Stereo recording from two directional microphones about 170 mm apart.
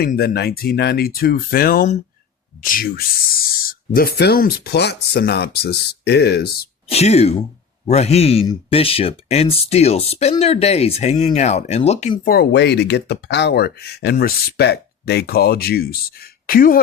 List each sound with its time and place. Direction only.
0.0 s speech: 65° left (ahead or behind)
6.8 s speech: 40° left (ahead or behind)
12.2 s speech: 65° left (ahead or behind)